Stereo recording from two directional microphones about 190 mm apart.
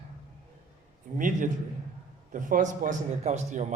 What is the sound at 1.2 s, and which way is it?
A man's voice, 45° right (ahead or behind).